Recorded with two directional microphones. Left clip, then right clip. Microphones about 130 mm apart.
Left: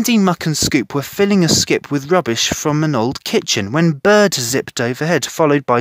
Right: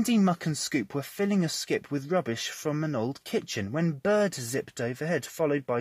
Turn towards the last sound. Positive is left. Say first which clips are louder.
# left 14 dB
turn(degrees=90)